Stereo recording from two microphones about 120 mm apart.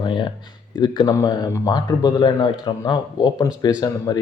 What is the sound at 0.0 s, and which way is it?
Speech, 40° left (ahead or behind).